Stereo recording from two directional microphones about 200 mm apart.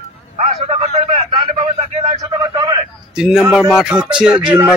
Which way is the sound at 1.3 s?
25° right (ahead or behind).